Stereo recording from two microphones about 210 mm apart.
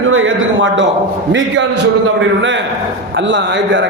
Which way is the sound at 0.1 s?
65° right (ahead or behind).